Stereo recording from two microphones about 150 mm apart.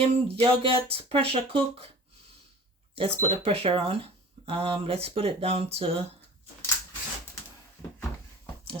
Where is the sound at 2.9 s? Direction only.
40° right (ahead or behind).